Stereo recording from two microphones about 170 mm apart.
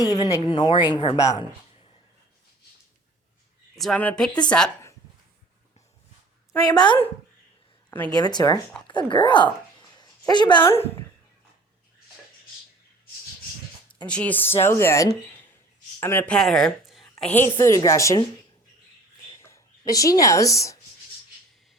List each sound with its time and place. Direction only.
0.0 s speech: 20° left (ahead or behind)
3.8 s speech: 5° left (ahead or behind)
6.7 s speech: 25° left (ahead or behind)
8.1 s speech: 25° left (ahead or behind)
10.0 s a sound: 25° left (ahead or behind)
14.1 s a woman's voice: 10° left (ahead or behind)
19.4 s speech: 15° left (ahead or behind)